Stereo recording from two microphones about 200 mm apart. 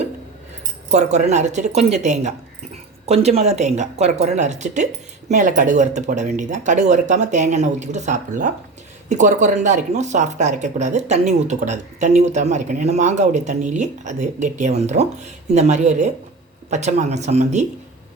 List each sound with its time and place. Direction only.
0.9 s speech: 35° right (ahead or behind)